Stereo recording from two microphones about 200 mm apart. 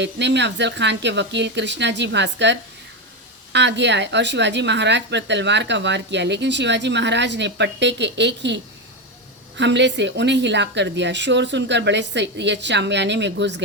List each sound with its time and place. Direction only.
0.0 s speech: 60° right (ahead or behind)